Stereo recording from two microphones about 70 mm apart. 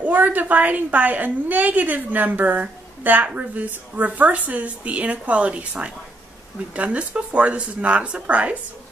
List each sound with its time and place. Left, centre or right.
0.0 s a woman's voice: right